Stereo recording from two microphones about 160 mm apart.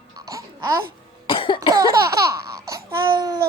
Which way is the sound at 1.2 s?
30° left (ahead or behind).